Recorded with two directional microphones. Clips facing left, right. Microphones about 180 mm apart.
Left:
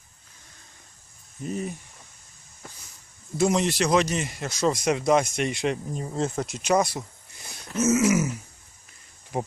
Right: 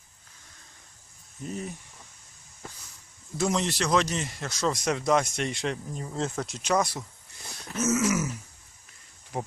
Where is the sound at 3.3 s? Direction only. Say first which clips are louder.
Left 5 dB; 10° left (ahead or behind).